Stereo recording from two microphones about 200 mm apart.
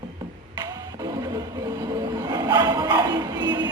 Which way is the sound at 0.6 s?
20° right (ahead or behind).